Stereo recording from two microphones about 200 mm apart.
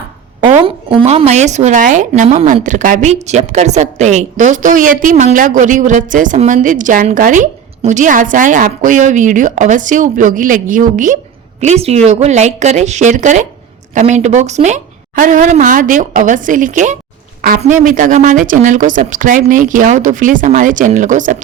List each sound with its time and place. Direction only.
0.4 s a woman's voice: 30° right (ahead or behind)